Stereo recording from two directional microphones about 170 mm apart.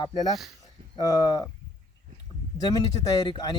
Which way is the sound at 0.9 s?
25° left (ahead or behind).